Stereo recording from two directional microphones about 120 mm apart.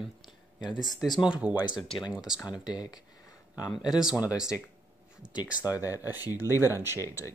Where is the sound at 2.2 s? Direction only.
5° right (ahead or behind).